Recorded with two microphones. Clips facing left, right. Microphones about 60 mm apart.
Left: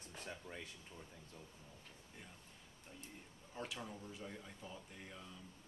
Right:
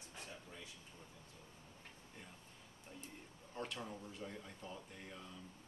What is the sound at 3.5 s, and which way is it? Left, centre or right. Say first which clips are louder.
Speech: right 1 dB; centre.